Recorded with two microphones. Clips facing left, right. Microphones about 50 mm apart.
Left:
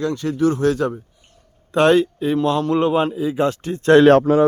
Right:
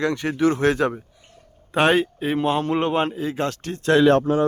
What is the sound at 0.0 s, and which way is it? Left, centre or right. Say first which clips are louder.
Speech: left 1 dB; right.